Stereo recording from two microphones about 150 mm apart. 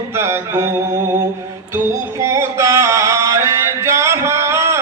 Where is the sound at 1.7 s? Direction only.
20° right (ahead or behind).